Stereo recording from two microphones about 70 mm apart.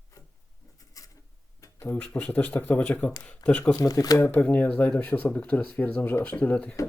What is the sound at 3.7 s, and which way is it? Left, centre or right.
Speech, left.